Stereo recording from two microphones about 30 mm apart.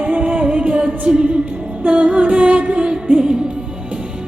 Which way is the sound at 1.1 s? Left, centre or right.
Right.